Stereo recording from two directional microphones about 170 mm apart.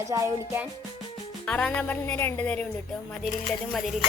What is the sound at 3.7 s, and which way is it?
Speech, centre (ahead or behind).